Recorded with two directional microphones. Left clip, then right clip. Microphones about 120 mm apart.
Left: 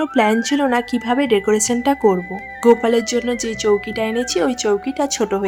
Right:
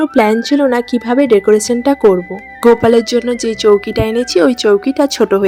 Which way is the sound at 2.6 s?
35° right (ahead or behind).